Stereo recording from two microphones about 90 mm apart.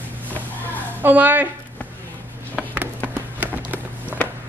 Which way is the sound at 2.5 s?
20° right (ahead or behind).